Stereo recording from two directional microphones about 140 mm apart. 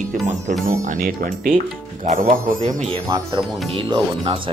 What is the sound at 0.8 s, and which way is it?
Speech, 65° right (ahead or behind).